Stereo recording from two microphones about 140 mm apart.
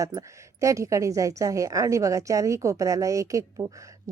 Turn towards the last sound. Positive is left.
turn(degrees=-25)  # may be behind; listen again after turning